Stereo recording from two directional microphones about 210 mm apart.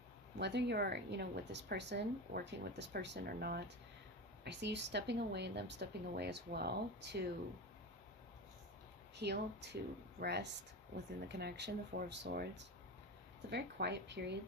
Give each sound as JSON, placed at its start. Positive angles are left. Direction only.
{"t": 0.3, "sound": "speech", "side_deg": -55}
{"t": 9.1, "sound": "speech", "side_deg": -55}